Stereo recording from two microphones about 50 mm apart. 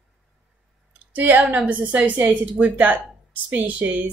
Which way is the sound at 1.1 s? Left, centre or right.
Right.